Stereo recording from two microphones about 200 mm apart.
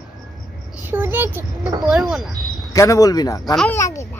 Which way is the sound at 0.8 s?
10° right (ahead or behind).